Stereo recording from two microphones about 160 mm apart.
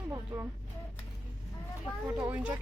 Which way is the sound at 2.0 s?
15° right (ahead or behind).